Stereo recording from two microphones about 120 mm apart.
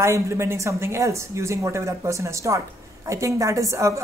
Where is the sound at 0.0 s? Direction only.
20° right (ahead or behind).